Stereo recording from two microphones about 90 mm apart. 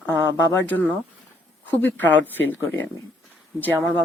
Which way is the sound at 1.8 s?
20° left (ahead or behind).